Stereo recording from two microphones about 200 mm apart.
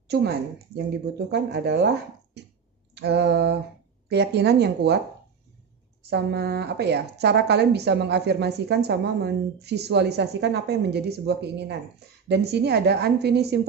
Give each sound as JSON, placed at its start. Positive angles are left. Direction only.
{"t": 0.1, "sound": "a woman's voice", "side_deg": -55}
{"t": 2.9, "sound": "a sound", "side_deg": -55}
{"t": 4.1, "sound": "a woman's voice", "side_deg": -55}
{"t": 6.0, "sound": "a woman's voice", "side_deg": -55}